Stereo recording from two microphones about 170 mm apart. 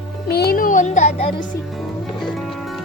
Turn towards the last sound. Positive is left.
turn(degrees=40)  # may be behind; listen again after turning